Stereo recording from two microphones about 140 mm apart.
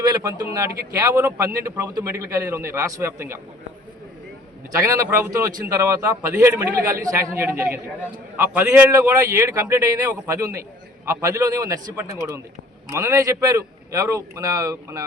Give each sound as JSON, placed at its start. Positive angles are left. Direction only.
{"t": 0.0, "sound": "a man's voice", "side_deg": -25}
{"t": 4.7, "sound": "a man's voice", "side_deg": -20}